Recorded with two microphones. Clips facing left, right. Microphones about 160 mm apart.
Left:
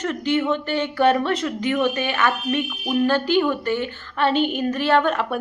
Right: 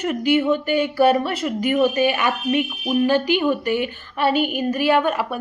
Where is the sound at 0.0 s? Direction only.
10° right (ahead or behind).